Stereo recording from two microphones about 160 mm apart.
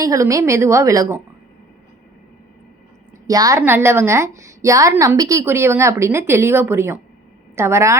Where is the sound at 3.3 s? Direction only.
20° right (ahead or behind).